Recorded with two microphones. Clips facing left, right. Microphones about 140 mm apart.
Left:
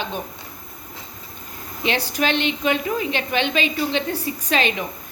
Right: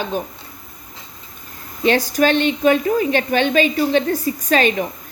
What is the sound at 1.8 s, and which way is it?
A woman's voice, 45° right (ahead or behind).